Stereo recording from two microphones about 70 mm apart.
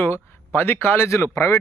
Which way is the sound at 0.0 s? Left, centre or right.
Left.